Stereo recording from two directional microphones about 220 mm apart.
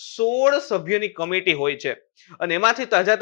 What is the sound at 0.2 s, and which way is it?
A man's voice, 25° left (ahead or behind).